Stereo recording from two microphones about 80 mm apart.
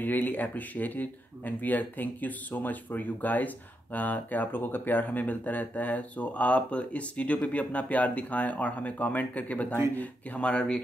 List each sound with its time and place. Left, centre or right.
0.0 s speech: left